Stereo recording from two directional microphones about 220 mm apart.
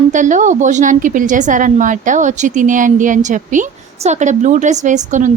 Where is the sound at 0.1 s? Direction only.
35° right (ahead or behind).